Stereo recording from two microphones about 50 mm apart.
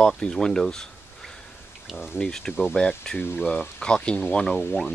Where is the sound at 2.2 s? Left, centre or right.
Centre.